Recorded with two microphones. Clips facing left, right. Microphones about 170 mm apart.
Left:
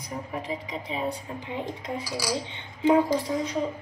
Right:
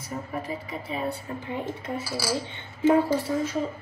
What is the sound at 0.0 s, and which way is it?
A woman's voice, 15° left (ahead or behind).